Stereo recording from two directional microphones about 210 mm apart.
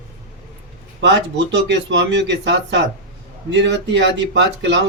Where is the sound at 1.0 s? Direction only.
55° right (ahead or behind).